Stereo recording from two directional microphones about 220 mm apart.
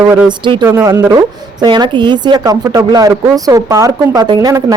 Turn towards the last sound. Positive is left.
turn(degrees=-15)  # may be behind; listen again after turning